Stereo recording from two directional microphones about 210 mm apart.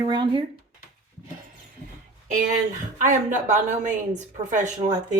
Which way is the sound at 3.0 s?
35° right (ahead or behind).